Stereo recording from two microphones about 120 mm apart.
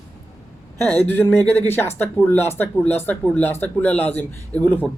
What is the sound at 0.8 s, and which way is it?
Speech, 15° left (ahead or behind).